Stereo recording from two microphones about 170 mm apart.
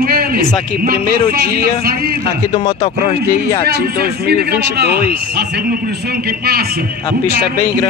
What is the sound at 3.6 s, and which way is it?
Speech, 65° right (ahead or behind).